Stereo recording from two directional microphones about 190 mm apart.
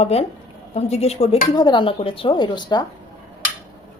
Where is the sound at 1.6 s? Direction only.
25° left (ahead or behind).